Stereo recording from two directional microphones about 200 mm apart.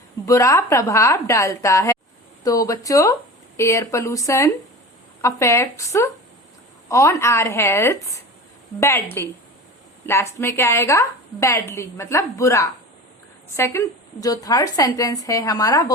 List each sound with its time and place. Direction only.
0.3 s a woman's voice: 15° left (ahead or behind)